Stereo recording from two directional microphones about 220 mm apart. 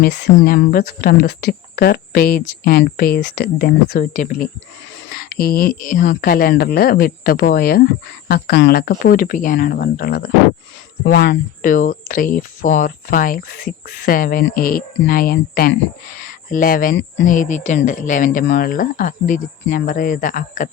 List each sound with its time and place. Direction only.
0.0 s speech: 50° left (ahead or behind)
16.9 s speech: 55° left (ahead or behind)
17.2 s speech: 35° left (ahead or behind)